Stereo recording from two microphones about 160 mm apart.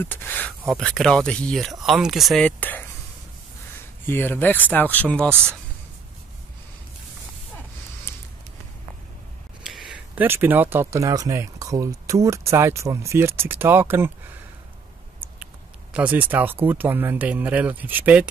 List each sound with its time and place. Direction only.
0.0 s speech: 10° left (ahead or behind)
4.0 s speech: 15° left (ahead or behind)
5.3 s speech: 15° right (ahead or behind)
9.6 s speech: centre (ahead or behind)
15.9 s speech: 10° right (ahead or behind)